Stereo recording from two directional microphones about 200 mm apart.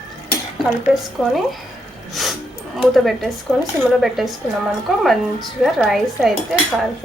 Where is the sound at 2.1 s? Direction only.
Centre (ahead or behind).